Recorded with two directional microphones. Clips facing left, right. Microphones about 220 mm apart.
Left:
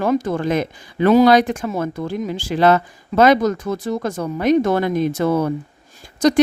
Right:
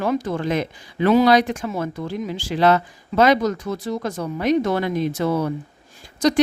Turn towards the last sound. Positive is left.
turn(degrees=50)  # may be behind; listen again after turning